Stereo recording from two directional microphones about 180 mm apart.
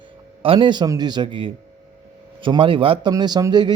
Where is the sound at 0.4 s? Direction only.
30° right (ahead or behind).